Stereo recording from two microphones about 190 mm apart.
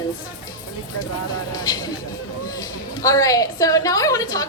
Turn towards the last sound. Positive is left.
turn(degrees=20)  # may be behind; listen again after turning